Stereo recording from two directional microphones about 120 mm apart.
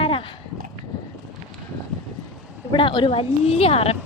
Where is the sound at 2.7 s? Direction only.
40° left (ahead or behind).